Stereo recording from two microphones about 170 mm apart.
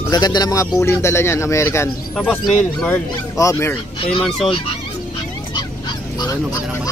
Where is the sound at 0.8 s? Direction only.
15° left (ahead or behind).